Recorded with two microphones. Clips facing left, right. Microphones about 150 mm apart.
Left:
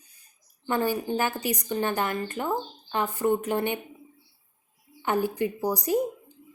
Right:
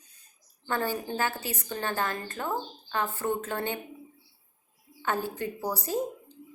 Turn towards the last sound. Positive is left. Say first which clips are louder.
# left 5 dB
turn(degrees=15)  # may be behind; listen again after turning